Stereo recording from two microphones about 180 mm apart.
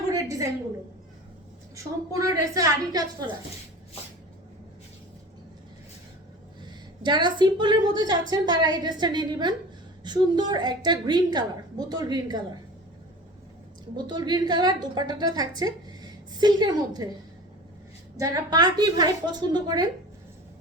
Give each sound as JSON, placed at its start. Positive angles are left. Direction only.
{"t": 0.1, "sound": "a sound", "side_deg": -20}
{"t": 1.7, "sound": "a woman's voice", "side_deg": -20}
{"t": 7.0, "sound": "a woman's voice", "side_deg": -25}
{"t": 13.9, "sound": "a woman's voice", "side_deg": -25}
{"t": 18.2, "sound": "a woman's voice", "side_deg": -20}